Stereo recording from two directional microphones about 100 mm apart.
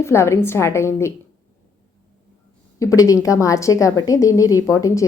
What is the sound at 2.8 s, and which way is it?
A woman's voice, 35° left (ahead or behind).